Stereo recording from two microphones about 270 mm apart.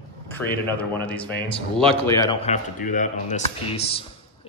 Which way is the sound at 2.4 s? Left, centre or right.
Left.